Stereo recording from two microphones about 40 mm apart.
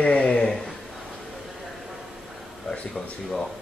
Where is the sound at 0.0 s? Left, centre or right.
Left; by 0.7 s centre.